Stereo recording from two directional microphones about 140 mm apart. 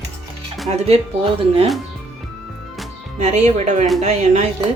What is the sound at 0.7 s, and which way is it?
Speech, 50° right (ahead or behind).